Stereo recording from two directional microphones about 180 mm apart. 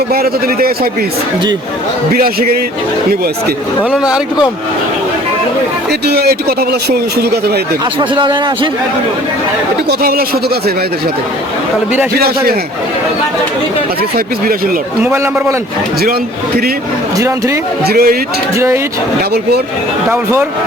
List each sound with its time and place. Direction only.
0.1 s a man's voice: 55° right (ahead or behind)
2.1 s a man's voice: 55° right (ahead or behind)
6.1 s a man's voice: 60° right (ahead or behind)
8.1 s a man's voice: 25° right (ahead or behind)
10.0 s a man's voice: 55° right (ahead or behind)
12.1 s a man's voice: 60° right (ahead or behind)
15.0 s a man's voice: 15° right (ahead or behind)
17.8 s a man's voice: 55° right (ahead or behind)